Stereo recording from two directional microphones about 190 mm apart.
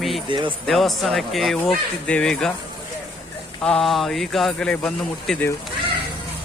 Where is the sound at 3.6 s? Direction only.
5° left (ahead or behind).